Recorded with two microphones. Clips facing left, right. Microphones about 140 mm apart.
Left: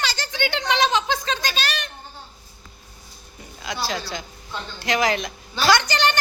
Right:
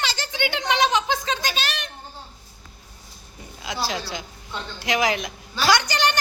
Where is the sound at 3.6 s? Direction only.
10° right (ahead or behind).